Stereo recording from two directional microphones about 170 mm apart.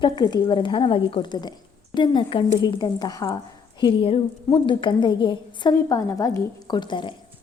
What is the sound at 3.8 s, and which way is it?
A woman's voice, 30° left (ahead or behind).